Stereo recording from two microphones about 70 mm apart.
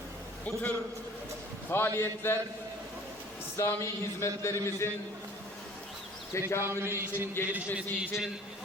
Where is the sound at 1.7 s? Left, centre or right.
Left.